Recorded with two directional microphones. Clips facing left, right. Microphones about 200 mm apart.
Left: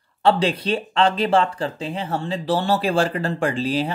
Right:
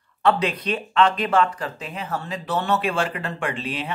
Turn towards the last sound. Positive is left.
turn(degrees=35)  # may be behind; listen again after turning